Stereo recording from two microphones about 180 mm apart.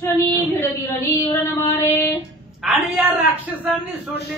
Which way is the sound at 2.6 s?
Centre (ahead or behind).